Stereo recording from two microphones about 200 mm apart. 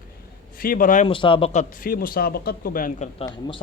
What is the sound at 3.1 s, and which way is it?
Speech, 25° left (ahead or behind).